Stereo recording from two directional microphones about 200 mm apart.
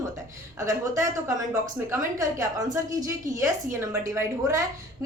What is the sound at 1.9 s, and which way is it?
A woman's voice, 15° right (ahead or behind).